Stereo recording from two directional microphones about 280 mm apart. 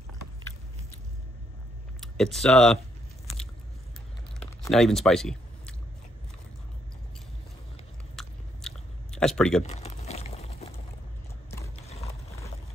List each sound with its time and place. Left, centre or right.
2.0 s speech: centre
4.5 s chewing: centre
8.2 s chewing: centre
9.6 s boiling: left
11.7 s mechanisms: left